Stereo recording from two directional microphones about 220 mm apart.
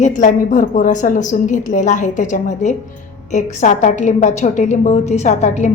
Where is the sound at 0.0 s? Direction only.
35° left (ahead or behind).